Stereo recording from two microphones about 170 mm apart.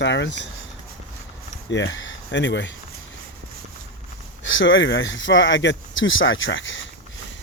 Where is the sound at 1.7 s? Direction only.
90° left.